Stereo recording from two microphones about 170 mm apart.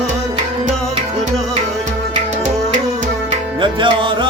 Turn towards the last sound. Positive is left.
turn(degrees=-30)  # may be behind; listen again after turning